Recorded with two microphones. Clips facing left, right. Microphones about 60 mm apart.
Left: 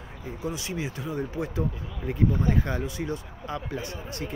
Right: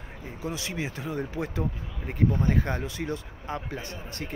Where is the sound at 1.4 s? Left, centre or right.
Right.